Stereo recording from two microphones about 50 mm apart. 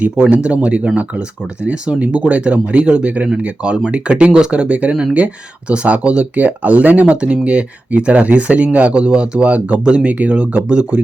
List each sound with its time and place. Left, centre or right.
0.0 s speech: right
7.1 s speech: right